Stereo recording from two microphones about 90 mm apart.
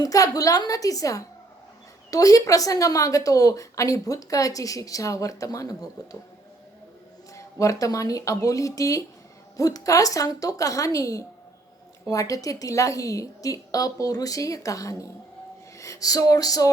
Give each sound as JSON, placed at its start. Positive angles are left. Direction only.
{"t": 0.0, "sound": "a woman's voice", "side_deg": 40}
{"t": 7.3, "sound": "a woman's voice", "side_deg": 35}
{"t": 15.8, "sound": "music", "side_deg": 40}